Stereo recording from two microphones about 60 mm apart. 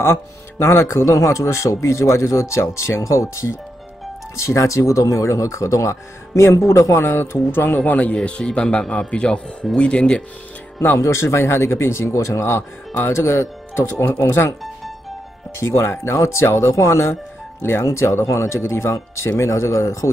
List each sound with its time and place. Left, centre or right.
0.0 s speech: left
7.0 s speech: left; by 10.2 s centre
11.0 s speech: left
15.5 s speech: left